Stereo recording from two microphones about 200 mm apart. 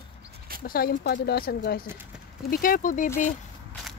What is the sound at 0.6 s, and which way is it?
Speech, 50° left (ahead or behind).